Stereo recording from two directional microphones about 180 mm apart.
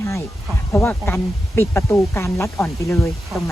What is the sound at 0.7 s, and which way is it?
Speech, 10° left (ahead or behind).